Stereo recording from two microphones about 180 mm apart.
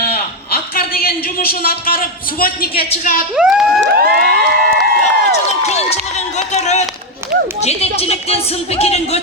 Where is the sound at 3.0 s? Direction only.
50° left (ahead or behind).